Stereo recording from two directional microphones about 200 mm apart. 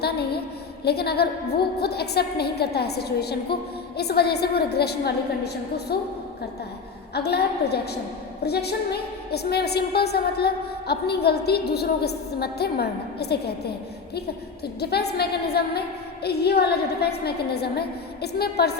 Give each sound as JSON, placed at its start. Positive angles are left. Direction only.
{"t": 0.9, "sound": "a woman's voice", "side_deg": 55}
{"t": 7.1, "sound": "a woman's voice", "side_deg": 55}
{"t": 14.8, "sound": "a woman's voice", "side_deg": 55}